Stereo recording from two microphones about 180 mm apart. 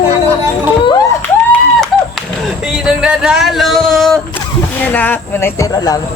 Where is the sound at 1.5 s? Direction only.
Centre (ahead or behind).